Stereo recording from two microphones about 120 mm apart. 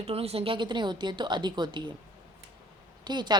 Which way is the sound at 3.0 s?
40° right (ahead or behind).